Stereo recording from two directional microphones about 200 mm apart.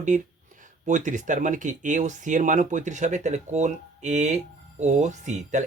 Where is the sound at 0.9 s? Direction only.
40° right (ahead or behind).